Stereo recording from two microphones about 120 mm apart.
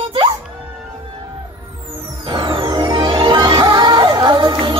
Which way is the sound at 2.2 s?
45° right (ahead or behind).